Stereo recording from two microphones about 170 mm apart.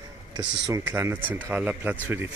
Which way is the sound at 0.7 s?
15° right (ahead or behind).